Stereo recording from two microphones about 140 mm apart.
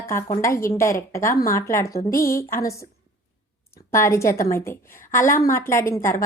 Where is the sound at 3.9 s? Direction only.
20° left (ahead or behind).